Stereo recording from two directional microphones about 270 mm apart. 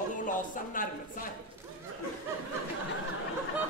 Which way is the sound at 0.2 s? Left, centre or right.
Left.